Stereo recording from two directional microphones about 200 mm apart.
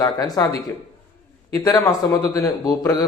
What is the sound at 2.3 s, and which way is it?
Speech, 15° left (ahead or behind).